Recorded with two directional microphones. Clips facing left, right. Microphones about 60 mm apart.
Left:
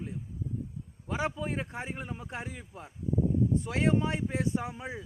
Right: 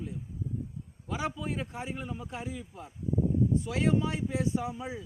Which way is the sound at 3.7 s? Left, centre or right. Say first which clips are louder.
Even; left.